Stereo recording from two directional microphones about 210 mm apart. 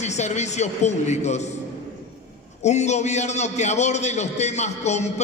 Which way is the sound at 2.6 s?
35° left (ahead or behind).